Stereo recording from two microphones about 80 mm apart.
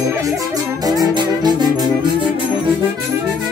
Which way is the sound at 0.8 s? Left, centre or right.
Right.